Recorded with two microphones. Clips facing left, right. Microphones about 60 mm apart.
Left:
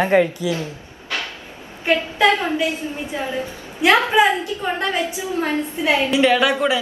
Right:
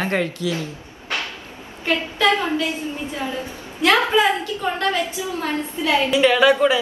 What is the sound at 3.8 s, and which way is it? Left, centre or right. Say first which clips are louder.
A woman's voice: left 2 dB; left.